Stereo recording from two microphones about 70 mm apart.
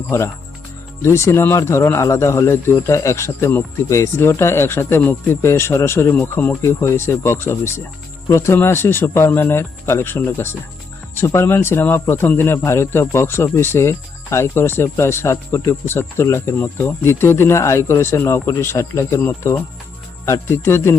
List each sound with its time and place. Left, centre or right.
0.1 s speech: left
6.6 s speech: left